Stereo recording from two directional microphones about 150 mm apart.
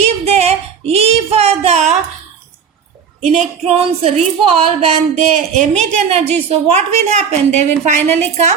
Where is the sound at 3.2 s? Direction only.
45° right (ahead or behind).